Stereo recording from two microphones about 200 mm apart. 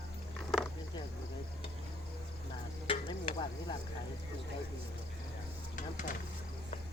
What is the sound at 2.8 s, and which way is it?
Stir, 25° left (ahead or behind).